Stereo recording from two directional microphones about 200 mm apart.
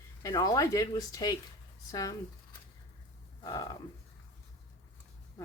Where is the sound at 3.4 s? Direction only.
20° left (ahead or behind).